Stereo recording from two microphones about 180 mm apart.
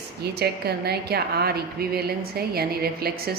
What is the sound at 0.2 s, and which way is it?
A woman's voice, 60° right (ahead or behind).